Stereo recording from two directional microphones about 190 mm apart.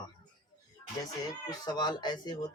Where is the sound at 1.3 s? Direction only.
20° left (ahead or behind).